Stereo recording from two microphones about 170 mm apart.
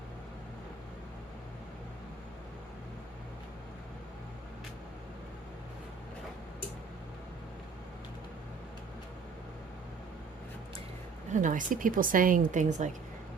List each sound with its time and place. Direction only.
11.3 s a woman's voice: 50° right (ahead or behind)